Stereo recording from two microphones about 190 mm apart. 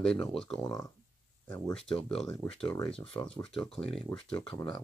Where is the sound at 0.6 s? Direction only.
15° left (ahead or behind).